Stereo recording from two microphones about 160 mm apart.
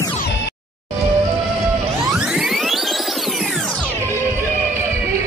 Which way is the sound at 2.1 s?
5° right (ahead or behind).